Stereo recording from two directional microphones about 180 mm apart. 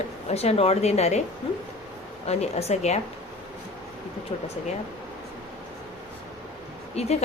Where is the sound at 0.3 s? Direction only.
35° left (ahead or behind).